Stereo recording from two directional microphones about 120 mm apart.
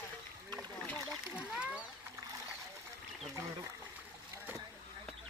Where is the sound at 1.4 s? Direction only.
10° right (ahead or behind).